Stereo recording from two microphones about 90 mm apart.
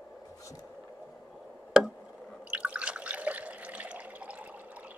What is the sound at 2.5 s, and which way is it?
Water, 15° right (ahead or behind).